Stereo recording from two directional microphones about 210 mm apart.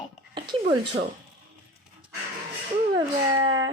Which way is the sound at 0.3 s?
20° right (ahead or behind).